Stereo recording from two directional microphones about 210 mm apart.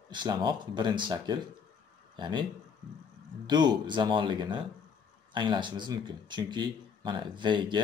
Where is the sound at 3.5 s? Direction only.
20° right (ahead or behind).